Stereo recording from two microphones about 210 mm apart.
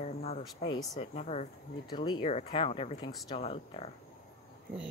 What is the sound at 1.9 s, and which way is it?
Speech, 20° left (ahead or behind).